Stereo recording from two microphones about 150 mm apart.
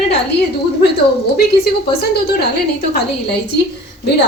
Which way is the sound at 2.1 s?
90° left.